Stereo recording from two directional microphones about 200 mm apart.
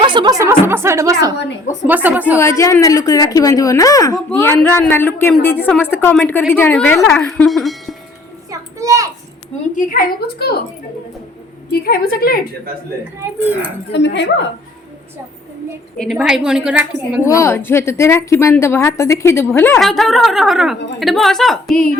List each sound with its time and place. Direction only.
0.0 s speech: 25° right (ahead or behind); by 2.4 s 10° right (ahead or behind)
2.4 s a woman's voice: 15° left (ahead or behind)
8.4 s a sound: 15° right (ahead or behind)
9.7 s a woman's voice: 45° left (ahead or behind)
11.7 s a woman's voice: 50° left (ahead or behind)
13.9 s a woman's voice: 60° left (ahead or behind)
16.0 s a woman's voice: centre (ahead or behind)
17.2 s a woman's voice: 15° left (ahead or behind)